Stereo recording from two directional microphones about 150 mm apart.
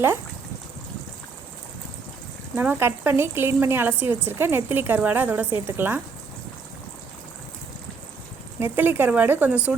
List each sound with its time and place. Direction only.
2.6 s a woman's voice: 15° right (ahead or behind)
8.5 s a woman's voice: 15° right (ahead or behind)